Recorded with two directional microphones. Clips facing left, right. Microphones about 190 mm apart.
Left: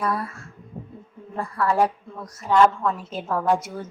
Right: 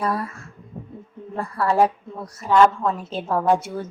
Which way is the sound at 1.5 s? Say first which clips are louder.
Right 2 dB; 30° right (ahead or behind).